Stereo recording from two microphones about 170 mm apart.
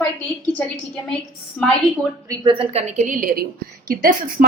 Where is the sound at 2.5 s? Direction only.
35° right (ahead or behind); by 4.5 s 60° right (ahead or behind).